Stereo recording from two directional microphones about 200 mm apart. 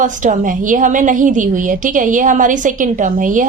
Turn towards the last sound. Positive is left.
turn(degrees=-40)  # may be behind; listen again after turning